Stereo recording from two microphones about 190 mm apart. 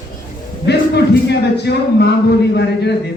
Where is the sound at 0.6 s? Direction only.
60° left (ahead or behind).